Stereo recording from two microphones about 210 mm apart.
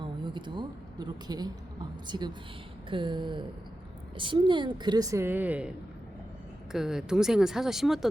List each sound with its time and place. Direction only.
0.0 s a woman's voice: 20° right (ahead or behind)
2.0 s a sound: 20° right (ahead or behind)
4.2 s a woman's voice: 25° right (ahead or behind); by 8.0 s centre (ahead or behind)